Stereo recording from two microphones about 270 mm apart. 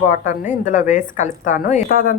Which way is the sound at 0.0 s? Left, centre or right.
Left.